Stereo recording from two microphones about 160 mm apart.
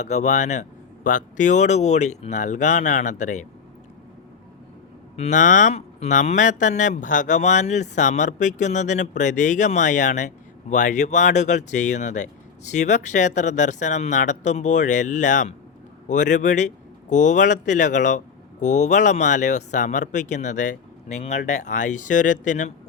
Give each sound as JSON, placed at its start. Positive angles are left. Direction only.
{"t": 0.0, "sound": "speech", "side_deg": 50}
{"t": 5.1, "sound": "speech", "side_deg": 45}